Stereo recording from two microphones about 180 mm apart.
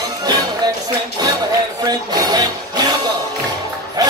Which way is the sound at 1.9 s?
25° right (ahead or behind).